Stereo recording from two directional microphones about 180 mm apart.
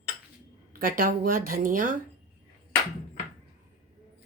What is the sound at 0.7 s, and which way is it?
Speech, 50° right (ahead or behind).